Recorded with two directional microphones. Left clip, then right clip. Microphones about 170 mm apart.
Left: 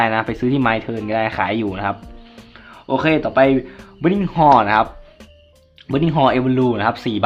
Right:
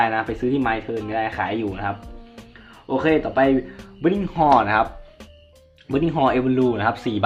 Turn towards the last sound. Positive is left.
turn(degrees=25)  # may be behind; listen again after turning